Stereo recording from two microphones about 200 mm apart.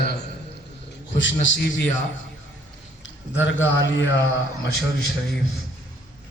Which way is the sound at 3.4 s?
65° left (ahead or behind).